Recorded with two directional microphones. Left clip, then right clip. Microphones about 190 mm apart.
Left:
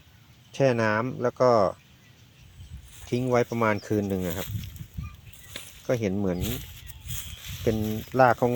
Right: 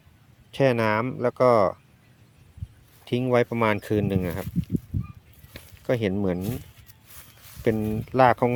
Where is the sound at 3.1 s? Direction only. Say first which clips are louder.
Right 2 dB; 35° right (ahead or behind).